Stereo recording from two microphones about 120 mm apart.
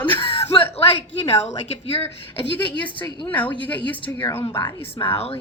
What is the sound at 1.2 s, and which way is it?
A woman's voice, 55° left (ahead or behind).